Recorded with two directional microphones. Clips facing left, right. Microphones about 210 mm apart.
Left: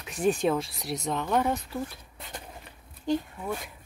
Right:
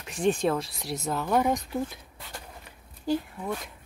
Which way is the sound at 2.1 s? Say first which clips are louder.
Left 3 dB; 20° left (ahead or behind).